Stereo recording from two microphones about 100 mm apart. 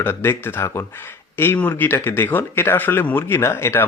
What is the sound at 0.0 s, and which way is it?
Speech, 25° left (ahead or behind).